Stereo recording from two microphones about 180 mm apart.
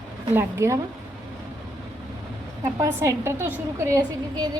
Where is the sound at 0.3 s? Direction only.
15° right (ahead or behind).